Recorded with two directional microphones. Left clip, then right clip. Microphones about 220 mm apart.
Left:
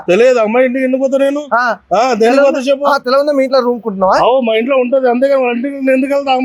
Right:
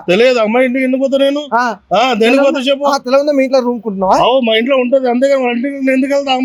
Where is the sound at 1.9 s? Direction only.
45° right (ahead or behind).